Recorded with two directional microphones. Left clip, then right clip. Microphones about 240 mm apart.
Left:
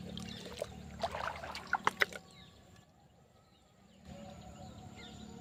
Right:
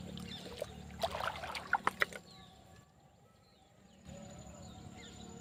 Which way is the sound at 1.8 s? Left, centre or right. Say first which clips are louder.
Left 2 dB; left.